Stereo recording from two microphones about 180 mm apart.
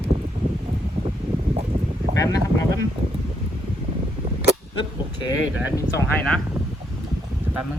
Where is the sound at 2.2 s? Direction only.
20° left (ahead or behind).